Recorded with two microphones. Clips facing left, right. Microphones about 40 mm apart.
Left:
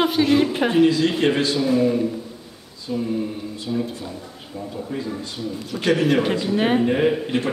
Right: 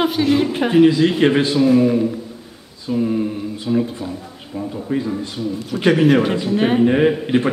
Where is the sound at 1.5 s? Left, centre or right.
Centre.